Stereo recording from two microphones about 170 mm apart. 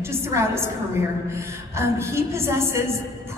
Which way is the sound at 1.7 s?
15° right (ahead or behind).